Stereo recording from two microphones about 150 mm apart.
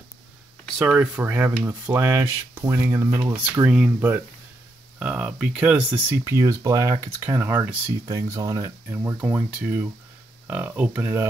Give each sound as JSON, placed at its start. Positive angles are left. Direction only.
{"t": 0.7, "sound": "speech", "side_deg": -10}
{"t": 3.6, "sound": "speech", "side_deg": -5}